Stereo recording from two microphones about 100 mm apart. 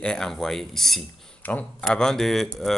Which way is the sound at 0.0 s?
5° left (ahead or behind).